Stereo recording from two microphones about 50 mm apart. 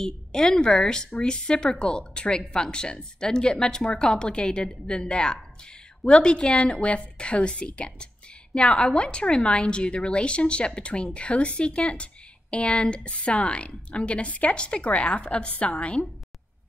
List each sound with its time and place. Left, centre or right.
0.0 s a woman's voice: centre